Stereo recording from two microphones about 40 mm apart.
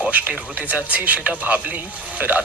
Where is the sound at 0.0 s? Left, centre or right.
Right.